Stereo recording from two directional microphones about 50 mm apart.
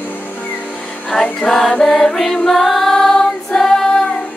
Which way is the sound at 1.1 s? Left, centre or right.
Centre.